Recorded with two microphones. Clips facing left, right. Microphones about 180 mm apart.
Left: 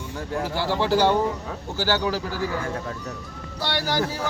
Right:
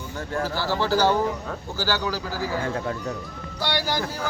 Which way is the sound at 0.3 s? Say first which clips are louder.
Left 1 dB; 20° left (ahead or behind).